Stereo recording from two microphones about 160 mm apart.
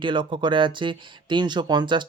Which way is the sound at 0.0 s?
30° right (ahead or behind).